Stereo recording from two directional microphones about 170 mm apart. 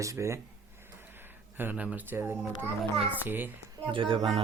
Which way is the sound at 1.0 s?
10° right (ahead or behind).